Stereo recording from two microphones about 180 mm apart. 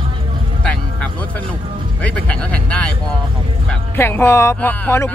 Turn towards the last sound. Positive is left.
turn(degrees=10)  # may be behind; listen again after turning